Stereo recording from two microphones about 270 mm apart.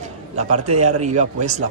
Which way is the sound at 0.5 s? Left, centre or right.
Right.